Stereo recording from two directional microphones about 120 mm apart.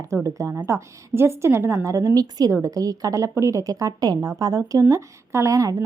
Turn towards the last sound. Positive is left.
turn(degrees=-25)  # may be behind; listen again after turning